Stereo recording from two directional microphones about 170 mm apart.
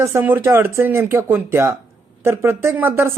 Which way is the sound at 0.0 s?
15° right (ahead or behind).